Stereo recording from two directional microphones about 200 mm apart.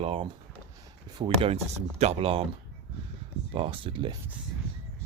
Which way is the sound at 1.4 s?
30° right (ahead or behind).